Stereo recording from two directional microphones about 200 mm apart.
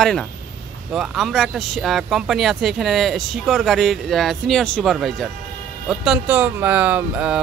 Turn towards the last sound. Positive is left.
turn(degrees=-5)  # may be behind; listen again after turning